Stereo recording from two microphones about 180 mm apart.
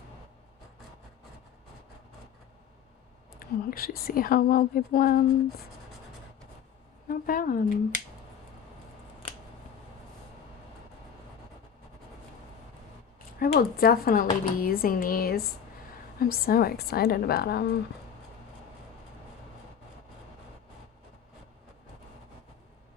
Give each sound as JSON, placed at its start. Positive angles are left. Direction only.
{"t": 3.7, "sound": "speech", "side_deg": 55}
{"t": 7.1, "sound": "speech", "side_deg": 55}
{"t": 13.4, "sound": "speech", "side_deg": 55}